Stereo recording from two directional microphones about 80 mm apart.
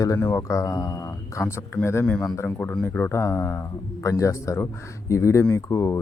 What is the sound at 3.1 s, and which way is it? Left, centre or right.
Speech, left.